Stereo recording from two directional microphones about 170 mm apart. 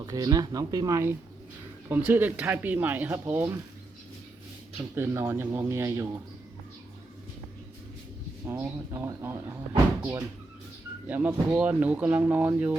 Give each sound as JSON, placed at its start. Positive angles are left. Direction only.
{"t": 0.0, "sound": "speech", "side_deg": -25}
{"t": 4.9, "sound": "speech", "side_deg": -15}
{"t": 8.4, "sound": "speech", "side_deg": -15}